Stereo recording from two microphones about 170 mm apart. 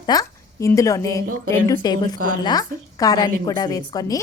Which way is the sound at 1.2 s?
55° right (ahead or behind).